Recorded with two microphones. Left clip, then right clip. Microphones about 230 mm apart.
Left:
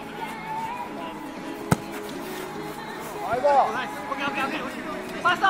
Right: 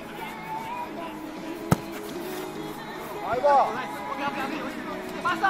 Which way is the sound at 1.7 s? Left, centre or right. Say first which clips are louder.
Left 1 dB; centre.